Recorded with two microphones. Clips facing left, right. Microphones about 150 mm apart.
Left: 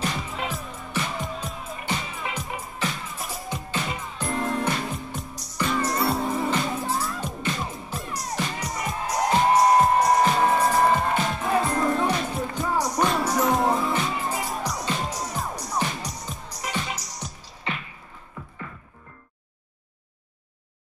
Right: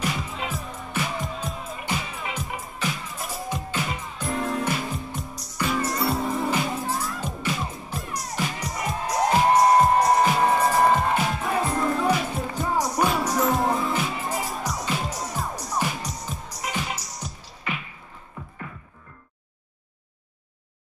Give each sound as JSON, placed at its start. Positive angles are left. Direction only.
{"t": 0.0, "sound": "music", "side_deg": 0}
{"t": 17.2, "sound": "music", "side_deg": 0}
{"t": 17.7, "sound": "a sound", "side_deg": 30}